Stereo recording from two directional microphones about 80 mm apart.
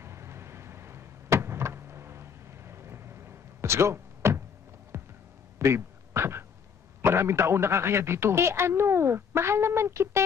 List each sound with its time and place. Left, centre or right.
0.0 s vehicle: right
4.9 s hum: right
5.6 s a sound: right
7.0 s a man's voice: right